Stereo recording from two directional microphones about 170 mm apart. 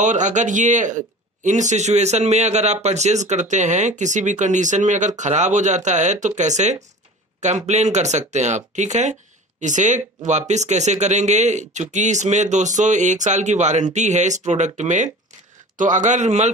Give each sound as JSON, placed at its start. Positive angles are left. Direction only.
{"t": 0.0, "sound": "a man's voice", "side_deg": -45}